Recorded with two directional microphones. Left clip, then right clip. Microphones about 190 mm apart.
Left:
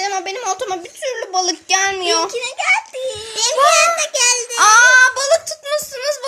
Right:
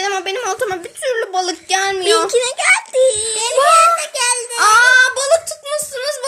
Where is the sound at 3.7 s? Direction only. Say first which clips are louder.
Right 3 dB; 55° left (ahead or behind).